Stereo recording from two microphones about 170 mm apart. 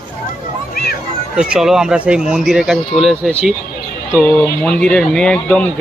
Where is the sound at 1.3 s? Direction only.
5° right (ahead or behind).